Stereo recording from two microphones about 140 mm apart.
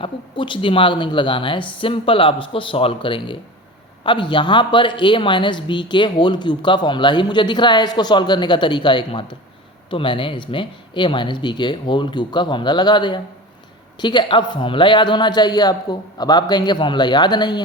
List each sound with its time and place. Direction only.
0.0 s speech: 35° left (ahead or behind)